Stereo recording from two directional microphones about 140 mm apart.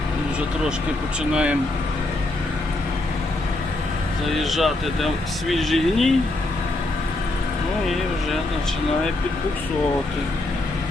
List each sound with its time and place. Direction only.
1.3 s speech: 10° right (ahead or behind)
4.3 s speech: centre (ahead or behind)